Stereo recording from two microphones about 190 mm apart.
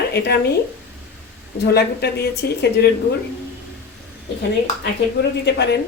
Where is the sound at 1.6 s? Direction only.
55° left (ahead or behind).